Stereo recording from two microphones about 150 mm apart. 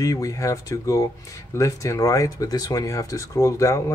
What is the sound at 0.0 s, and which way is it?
Speech, 20° left (ahead or behind).